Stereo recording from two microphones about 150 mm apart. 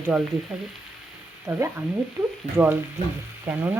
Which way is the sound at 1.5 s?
20° right (ahead or behind).